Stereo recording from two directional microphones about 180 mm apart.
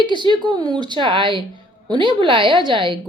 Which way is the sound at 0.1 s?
25° right (ahead or behind).